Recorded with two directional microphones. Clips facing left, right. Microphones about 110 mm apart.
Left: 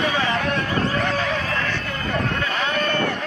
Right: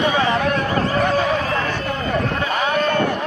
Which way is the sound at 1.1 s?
20° right (ahead or behind).